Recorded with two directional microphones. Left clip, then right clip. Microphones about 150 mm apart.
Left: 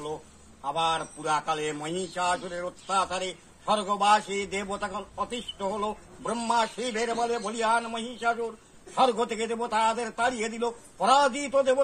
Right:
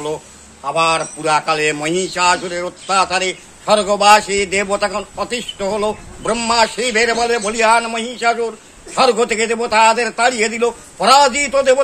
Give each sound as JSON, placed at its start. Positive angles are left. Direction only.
{"t": 0.7, "sound": "a man's voice", "side_deg": -25}